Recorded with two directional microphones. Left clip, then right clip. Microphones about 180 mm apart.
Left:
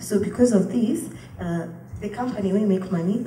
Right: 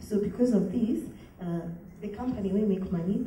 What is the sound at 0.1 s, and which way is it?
A woman's voice, 55° left (ahead or behind).